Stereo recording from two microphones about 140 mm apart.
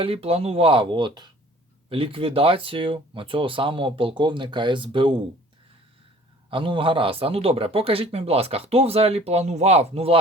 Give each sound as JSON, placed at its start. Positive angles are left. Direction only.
{"t": 0.0, "sound": "speech", "side_deg": -45}
{"t": 6.5, "sound": "speech", "side_deg": -40}